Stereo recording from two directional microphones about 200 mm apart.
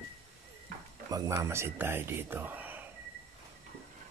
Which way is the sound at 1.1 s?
15° right (ahead or behind).